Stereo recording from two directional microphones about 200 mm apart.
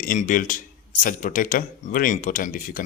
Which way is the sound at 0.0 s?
40° left (ahead or behind).